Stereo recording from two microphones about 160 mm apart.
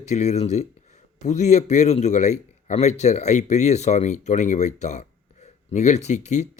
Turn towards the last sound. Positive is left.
turn(degrees=45)  # may be behind; listen again after turning